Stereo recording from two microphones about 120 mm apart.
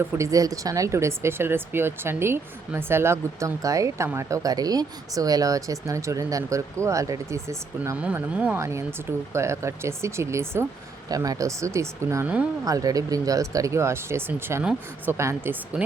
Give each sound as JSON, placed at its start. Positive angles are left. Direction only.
{"t": 0.2, "sound": "speech", "side_deg": -30}
{"t": 8.0, "sound": "speech", "side_deg": -10}
{"t": 9.3, "sound": "speech", "side_deg": -25}
{"t": 14.6, "sound": "speech", "side_deg": -10}
{"t": 15.2, "sound": "speech", "side_deg": -20}